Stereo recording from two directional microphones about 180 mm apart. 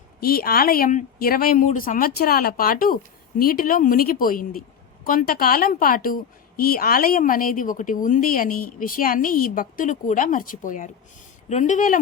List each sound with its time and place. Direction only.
0.2 s a woman's voice: 55° left (ahead or behind)